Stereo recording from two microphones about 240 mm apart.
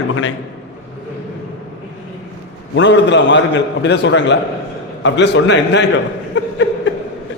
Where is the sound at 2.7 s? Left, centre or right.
Left.